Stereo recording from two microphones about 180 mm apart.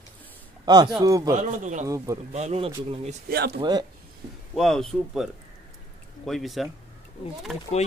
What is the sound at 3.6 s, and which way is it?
Speech, 25° right (ahead or behind).